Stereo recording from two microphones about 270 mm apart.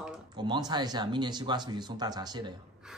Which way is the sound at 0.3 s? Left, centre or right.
Centre.